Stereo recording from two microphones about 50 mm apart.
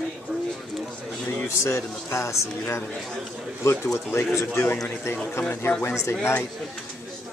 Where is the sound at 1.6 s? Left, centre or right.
Left.